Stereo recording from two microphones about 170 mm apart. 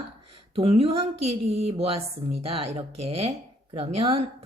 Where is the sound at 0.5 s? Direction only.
35° right (ahead or behind).